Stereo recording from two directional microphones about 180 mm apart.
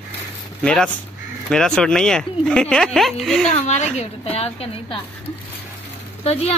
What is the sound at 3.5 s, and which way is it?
Speech, 40° left (ahead or behind).